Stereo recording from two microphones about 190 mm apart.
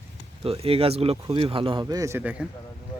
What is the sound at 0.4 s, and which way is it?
Speech, 30° right (ahead or behind).